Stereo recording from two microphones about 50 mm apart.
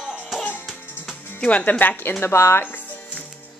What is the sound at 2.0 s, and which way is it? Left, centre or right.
Speech, left.